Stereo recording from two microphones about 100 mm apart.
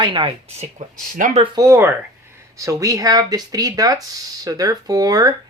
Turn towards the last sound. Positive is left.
turn(degrees=-40)  # may be behind; listen again after turning